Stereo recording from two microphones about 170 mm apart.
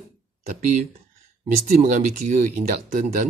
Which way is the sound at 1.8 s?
45° right (ahead or behind).